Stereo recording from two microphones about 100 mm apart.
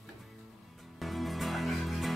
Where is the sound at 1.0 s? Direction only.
Centre (ahead or behind).